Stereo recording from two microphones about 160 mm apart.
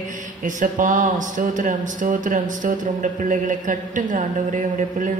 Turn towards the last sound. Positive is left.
turn(degrees=-55)  # may be behind; listen again after turning